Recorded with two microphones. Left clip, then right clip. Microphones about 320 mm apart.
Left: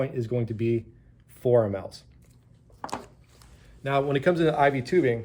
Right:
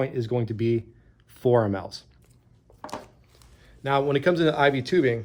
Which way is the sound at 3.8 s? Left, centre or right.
Right.